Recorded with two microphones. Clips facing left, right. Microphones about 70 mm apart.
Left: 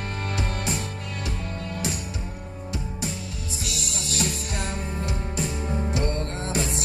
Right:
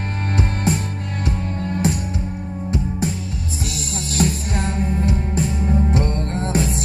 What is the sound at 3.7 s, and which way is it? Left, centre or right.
Music, right.